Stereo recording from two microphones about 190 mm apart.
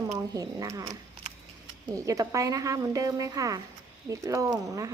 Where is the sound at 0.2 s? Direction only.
15° right (ahead or behind).